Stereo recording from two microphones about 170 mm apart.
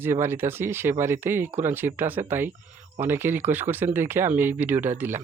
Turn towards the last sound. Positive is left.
turn(degrees=-15)  # may be behind; listen again after turning